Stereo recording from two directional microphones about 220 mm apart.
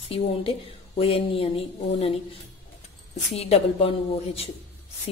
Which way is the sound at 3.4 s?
30° left (ahead or behind).